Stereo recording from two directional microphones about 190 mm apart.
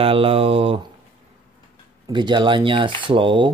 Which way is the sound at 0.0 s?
30° right (ahead or behind).